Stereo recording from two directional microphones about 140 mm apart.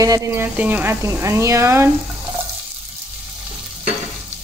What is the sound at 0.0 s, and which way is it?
Speech, 25° right (ahead or behind).